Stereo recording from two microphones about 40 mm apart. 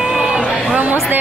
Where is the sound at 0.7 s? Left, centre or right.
Right.